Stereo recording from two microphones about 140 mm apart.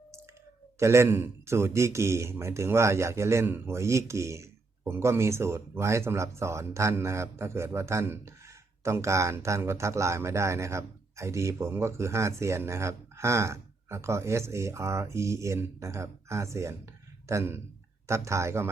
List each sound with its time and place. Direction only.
0.8 s a man's voice: 20° right (ahead or behind)